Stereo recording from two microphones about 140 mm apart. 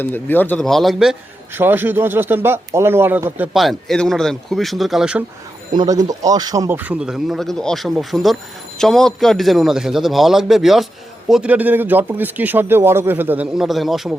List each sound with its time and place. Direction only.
0.0 s speech: 15° left (ahead or behind)
0.6 s a man's voice: centre (ahead or behind)
1.5 s speech: 15° right (ahead or behind)
3.5 s a man's voice: centre (ahead or behind)
5.7 s speech: 30° right (ahead or behind)
6.7 s a man's voice: 10° right (ahead or behind)